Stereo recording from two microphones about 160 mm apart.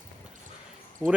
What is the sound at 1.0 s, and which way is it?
Speech, 5° right (ahead or behind).